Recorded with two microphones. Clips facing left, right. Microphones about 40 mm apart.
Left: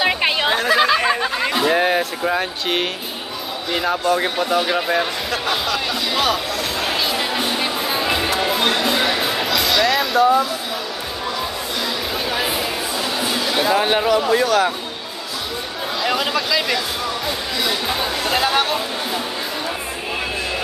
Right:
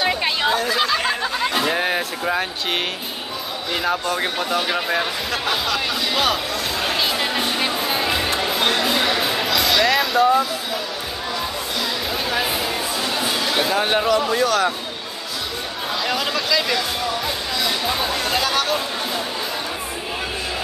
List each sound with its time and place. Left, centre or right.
0.0 s chatter: left
1.5 s speech: centre
6.8 s music: centre
8.4 s a sound: centre
12.3 s a sound: centre
13.2 s speech: centre
16.0 s a sound: centre
17.6 s chatter: centre
18.4 s speech: centre